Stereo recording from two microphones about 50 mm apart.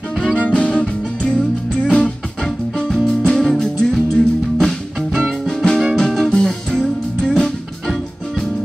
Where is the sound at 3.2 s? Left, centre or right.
Centre.